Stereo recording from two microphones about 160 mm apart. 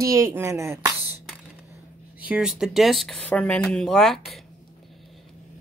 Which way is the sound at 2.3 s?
5° right (ahead or behind).